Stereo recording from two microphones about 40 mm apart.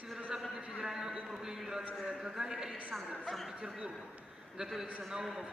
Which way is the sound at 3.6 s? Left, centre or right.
Centre.